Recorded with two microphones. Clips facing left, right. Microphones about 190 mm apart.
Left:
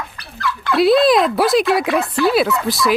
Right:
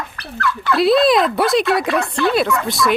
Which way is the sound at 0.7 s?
Centre (ahead or behind).